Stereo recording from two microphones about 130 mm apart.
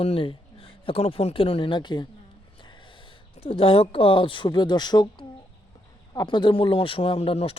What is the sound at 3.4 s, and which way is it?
Speech, 45° left (ahead or behind).